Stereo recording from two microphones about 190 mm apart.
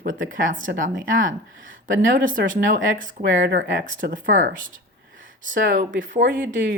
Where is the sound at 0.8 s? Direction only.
45° right (ahead or behind).